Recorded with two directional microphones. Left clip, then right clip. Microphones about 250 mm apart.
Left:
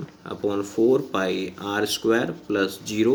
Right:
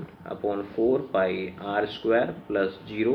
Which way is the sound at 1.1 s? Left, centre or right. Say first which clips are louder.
Even; left.